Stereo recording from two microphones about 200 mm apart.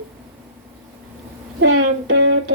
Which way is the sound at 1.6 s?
70° right (ahead or behind).